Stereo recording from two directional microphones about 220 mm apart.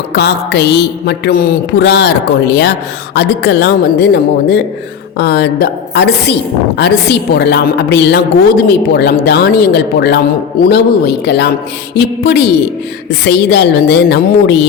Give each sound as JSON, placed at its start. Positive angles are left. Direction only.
{"t": 0.1, "sound": "a woman's voice", "side_deg": 50}